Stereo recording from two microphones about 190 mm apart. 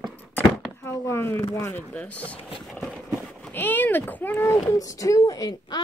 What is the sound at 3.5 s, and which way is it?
Speech, 10° left (ahead or behind).